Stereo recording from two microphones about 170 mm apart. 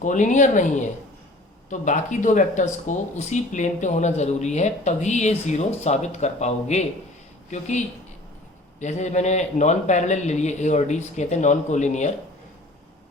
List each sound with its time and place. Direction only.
0.0 s speech: 45° left (ahead or behind)